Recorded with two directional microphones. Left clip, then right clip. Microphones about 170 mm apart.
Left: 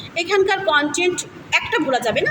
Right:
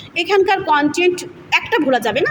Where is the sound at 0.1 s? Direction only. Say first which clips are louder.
Right 3 dB; 65° right (ahead or behind).